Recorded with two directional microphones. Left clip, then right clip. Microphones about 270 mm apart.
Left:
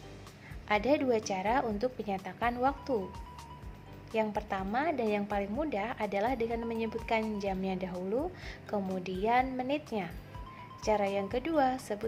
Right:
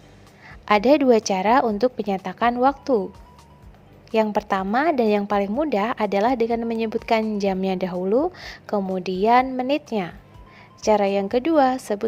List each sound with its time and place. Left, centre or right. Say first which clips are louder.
0.6 s a woman's voice: right 12 dB; right
4.1 s a woman's voice: right 12 dB; right